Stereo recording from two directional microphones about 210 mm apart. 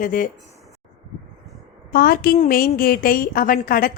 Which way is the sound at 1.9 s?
45° left (ahead or behind).